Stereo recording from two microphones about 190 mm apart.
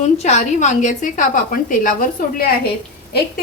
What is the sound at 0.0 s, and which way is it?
A woman's voice, 40° left (ahead or behind).